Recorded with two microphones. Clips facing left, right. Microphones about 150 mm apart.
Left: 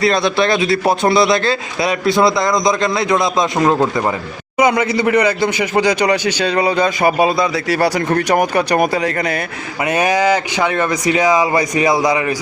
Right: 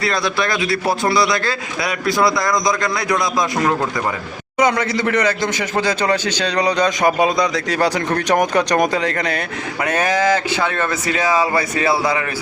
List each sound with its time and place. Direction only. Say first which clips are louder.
0.0 s speech: left 5 dB; 25° left (ahead or behind)
4.5 s speech: left 3 dB; 10° left (ahead or behind)